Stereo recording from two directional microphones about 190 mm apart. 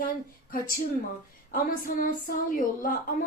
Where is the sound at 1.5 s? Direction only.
45° left (ahead or behind).